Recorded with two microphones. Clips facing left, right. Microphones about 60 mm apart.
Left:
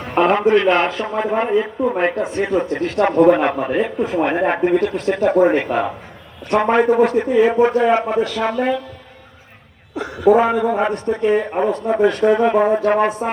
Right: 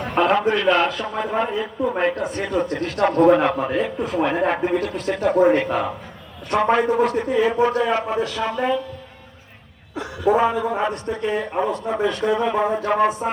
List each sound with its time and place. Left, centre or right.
0.2 s a man's voice: left
10.3 s a man's voice: left
10.8 s speech: left